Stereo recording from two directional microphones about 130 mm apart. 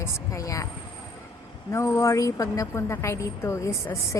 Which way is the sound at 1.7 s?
20° left (ahead or behind).